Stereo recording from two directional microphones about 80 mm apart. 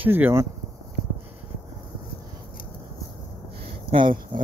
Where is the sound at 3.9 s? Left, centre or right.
Right.